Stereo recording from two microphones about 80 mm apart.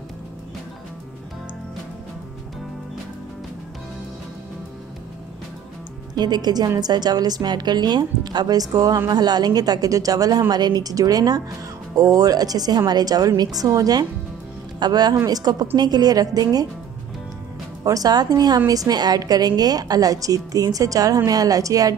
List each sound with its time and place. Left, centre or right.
6.1 s a woman's voice: right
17.8 s a woman's voice: right